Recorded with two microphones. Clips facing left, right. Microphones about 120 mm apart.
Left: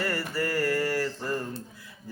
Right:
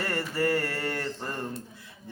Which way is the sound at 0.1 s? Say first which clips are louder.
Right 2 dB; 25° right (ahead or behind).